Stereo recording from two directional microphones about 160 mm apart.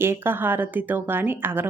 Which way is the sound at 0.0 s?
15° right (ahead or behind).